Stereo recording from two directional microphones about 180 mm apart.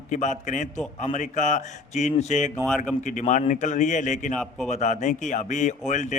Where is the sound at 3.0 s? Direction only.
45° left (ahead or behind).